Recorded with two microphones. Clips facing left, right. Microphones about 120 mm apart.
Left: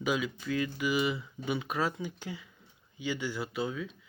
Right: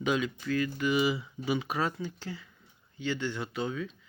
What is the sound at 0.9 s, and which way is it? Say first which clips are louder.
Speech: right 2 dB; 5° right (ahead or behind).